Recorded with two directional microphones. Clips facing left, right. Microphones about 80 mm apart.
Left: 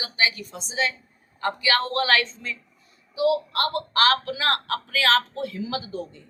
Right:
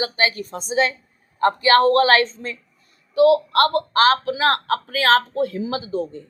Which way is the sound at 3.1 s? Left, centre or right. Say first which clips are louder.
Right 8 dB; right.